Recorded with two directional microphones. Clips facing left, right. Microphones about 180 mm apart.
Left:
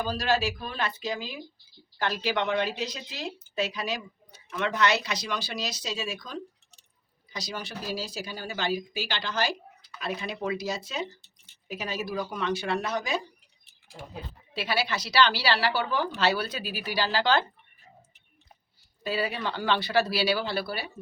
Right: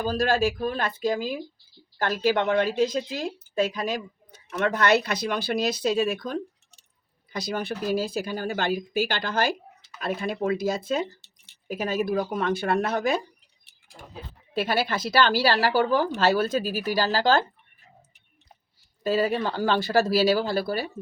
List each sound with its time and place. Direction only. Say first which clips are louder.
0.0 s speech: right 4 dB; 50° right (ahead or behind)
14.5 s speech: right 4 dB; 50° right (ahead or behind)
19.0 s speech: right 6 dB; 45° right (ahead or behind)